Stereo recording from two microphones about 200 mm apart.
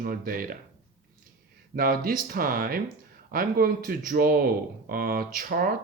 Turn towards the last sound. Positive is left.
turn(degrees=-45)  # may be behind; listen again after turning